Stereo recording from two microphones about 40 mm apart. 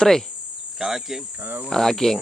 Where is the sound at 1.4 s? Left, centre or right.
Right.